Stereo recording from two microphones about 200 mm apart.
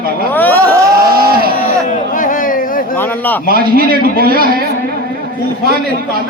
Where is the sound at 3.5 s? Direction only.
45° right (ahead or behind).